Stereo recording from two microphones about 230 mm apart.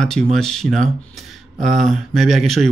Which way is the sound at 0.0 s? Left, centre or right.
Centre.